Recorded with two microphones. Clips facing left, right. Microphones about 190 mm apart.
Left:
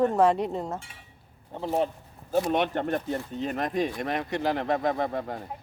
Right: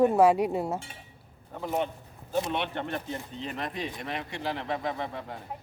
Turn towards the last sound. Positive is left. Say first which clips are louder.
# left 6 dB
turn(degrees=45)  # may be behind; listen again after turning